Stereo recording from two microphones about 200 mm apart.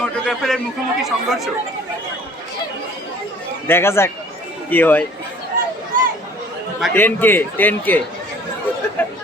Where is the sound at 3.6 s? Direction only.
10° left (ahead or behind).